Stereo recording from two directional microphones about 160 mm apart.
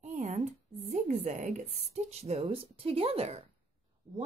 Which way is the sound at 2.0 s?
40° right (ahead or behind).